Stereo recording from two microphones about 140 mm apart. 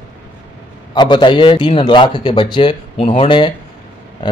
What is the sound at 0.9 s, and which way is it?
Speech, 35° left (ahead or behind).